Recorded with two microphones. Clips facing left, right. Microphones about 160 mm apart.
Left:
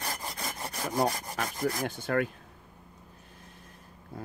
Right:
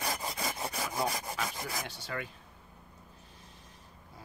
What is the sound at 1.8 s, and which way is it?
Speech, 50° left (ahead or behind).